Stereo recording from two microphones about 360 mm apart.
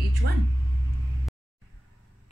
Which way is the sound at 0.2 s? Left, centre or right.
Right.